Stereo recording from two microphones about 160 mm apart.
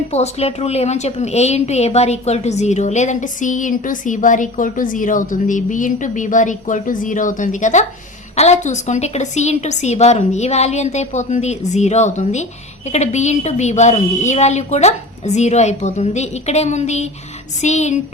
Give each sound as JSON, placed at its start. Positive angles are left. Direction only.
{"t": 0.1, "sound": "a woman's voice", "side_deg": 40}